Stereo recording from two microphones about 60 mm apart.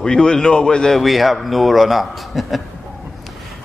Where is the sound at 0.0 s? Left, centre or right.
Centre.